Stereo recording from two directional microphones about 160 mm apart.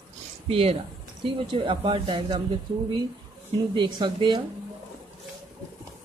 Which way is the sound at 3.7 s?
30° right (ahead or behind).